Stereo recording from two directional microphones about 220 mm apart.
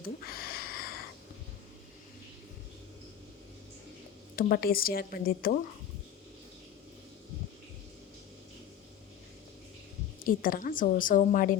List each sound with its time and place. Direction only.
0.3 s a sound: 45° left (ahead or behind)
4.4 s a woman's voice: 40° left (ahead or behind)
10.2 s a woman's voice: 40° left (ahead or behind)